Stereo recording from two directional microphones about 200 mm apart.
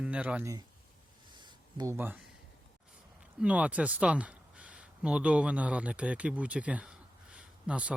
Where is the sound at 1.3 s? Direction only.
20° right (ahead or behind).